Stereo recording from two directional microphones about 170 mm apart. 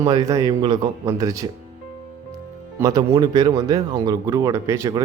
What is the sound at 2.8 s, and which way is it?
Speech, 20° right (ahead or behind).